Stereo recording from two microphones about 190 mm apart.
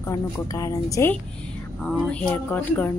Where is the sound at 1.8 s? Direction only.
5° left (ahead or behind).